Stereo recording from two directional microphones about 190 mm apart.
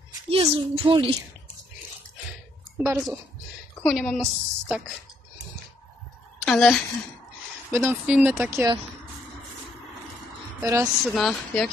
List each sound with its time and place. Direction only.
0.3 s speech: 25° right (ahead or behind)
2.8 s speech: 10° right (ahead or behind)
3.8 s a woman's voice: 5° left (ahead or behind)
6.4 s a woman's voice: centre (ahead or behind)
7.7 s speech: 15° right (ahead or behind)
10.6 s a woman's voice: 15° right (ahead or behind)
11.1 s a woman's voice: centre (ahead or behind)